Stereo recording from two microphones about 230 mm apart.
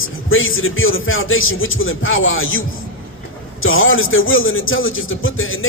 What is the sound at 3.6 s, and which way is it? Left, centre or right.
Speech, left.